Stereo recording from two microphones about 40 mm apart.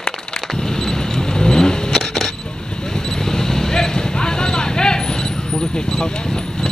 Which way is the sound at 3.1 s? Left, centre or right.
Centre.